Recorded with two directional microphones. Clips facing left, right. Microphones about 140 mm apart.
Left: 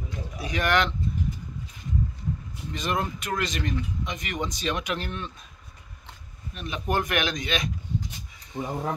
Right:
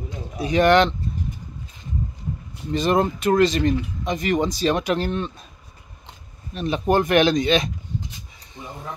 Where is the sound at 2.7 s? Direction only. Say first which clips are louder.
Right 9 dB; 30° right (ahead or behind).